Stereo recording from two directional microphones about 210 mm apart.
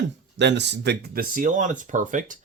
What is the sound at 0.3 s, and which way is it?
Speech, 55° right (ahead or behind).